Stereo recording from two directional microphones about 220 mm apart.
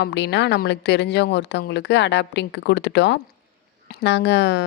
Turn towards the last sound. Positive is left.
turn(degrees=50)  # may be behind; listen again after turning